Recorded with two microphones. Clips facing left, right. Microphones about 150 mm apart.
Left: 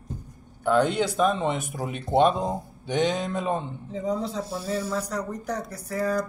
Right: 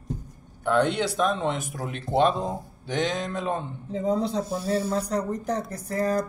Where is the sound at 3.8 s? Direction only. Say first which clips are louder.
Right 4 dB; 35° right (ahead or behind).